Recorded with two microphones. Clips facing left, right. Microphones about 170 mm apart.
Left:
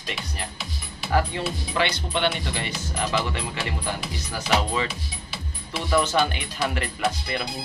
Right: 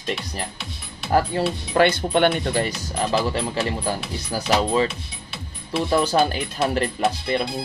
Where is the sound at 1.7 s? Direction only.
50° right (ahead or behind).